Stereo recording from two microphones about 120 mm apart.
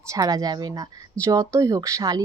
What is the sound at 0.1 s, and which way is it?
Speech, 30° right (ahead or behind).